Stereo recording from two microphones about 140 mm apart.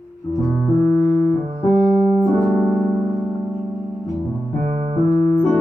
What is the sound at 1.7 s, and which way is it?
Keyboard, 10° right (ahead or behind).